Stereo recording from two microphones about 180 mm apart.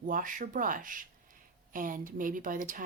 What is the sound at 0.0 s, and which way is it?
Speech, 50° right (ahead or behind).